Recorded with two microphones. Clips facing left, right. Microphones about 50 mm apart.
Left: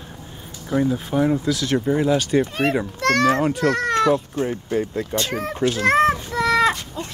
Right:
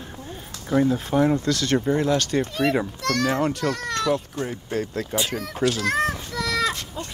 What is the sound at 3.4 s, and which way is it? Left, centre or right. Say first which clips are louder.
Speech: left 3 dB; centre.